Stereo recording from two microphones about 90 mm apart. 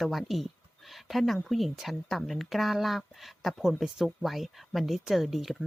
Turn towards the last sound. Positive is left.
turn(degrees=0)  # may be behind; listen again after turning